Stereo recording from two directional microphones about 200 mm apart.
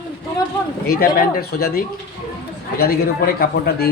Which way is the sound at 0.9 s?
45° left (ahead or behind).